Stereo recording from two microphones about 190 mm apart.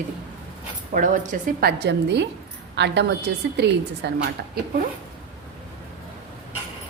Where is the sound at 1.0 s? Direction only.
45° right (ahead or behind); by 4.1 s 60° right (ahead or behind).